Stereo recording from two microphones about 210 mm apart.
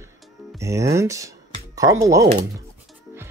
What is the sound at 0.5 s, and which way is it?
Speech, 15° right (ahead or behind).